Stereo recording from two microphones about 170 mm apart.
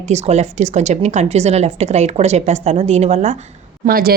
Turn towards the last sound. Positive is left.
turn(degrees=-60)  # may be behind; listen again after turning